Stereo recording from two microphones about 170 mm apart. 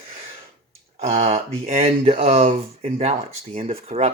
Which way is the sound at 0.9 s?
40° right (ahead or behind).